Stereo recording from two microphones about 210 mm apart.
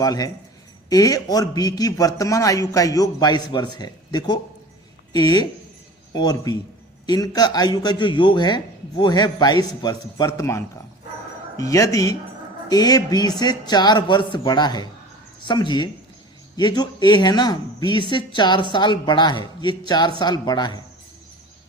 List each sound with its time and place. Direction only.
0.0 s a man's voice: 15° left (ahead or behind)